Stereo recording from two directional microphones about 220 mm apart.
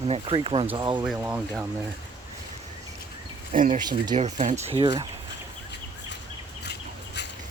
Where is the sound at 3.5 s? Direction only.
35° right (ahead or behind).